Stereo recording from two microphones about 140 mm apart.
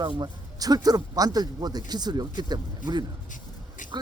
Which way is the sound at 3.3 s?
65° left (ahead or behind).